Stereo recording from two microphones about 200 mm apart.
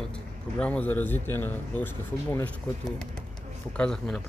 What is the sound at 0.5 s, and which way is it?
Speech, 5° left (ahead or behind).